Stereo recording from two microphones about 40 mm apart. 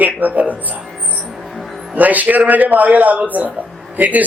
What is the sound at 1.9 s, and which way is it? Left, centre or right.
Speech, right.